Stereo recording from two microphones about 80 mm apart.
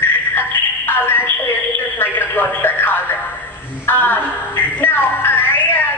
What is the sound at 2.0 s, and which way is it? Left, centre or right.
Music, left.